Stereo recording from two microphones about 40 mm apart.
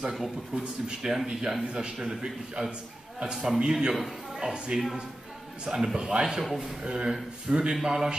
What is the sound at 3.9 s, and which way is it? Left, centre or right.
Speech, centre.